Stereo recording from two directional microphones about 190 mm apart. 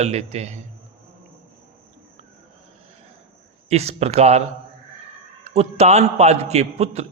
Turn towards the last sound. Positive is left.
turn(degrees=-35)  # may be behind; listen again after turning